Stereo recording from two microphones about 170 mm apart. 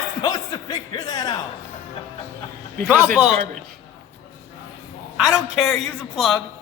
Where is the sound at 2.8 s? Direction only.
10° right (ahead or behind).